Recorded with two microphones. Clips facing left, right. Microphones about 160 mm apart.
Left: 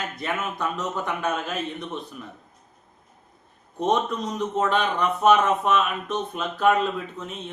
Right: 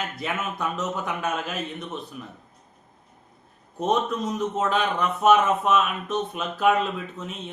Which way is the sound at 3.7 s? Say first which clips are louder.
Left 1 dB; 5° right (ahead or behind).